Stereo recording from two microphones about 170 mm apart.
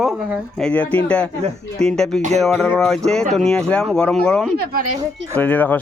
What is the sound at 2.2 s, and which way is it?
Music, 40° right (ahead or behind).